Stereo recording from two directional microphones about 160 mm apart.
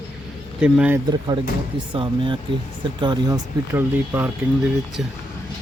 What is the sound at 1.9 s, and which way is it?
Speech, 30° right (ahead or behind).